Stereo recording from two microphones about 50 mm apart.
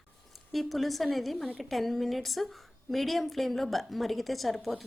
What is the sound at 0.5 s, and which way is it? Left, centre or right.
A woman's voice, centre.